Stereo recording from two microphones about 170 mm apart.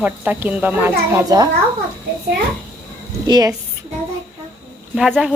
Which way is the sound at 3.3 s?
25° right (ahead or behind).